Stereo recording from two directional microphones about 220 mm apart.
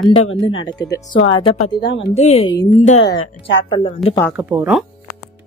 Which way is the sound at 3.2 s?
55° left (ahead or behind).